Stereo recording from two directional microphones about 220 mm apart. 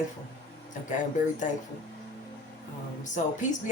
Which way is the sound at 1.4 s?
35° left (ahead or behind).